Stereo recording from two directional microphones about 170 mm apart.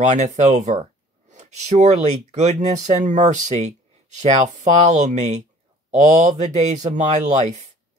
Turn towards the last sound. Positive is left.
turn(degrees=-40)  # may be behind; listen again after turning